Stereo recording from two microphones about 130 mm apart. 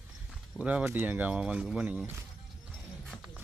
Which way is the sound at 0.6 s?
10° right (ahead or behind).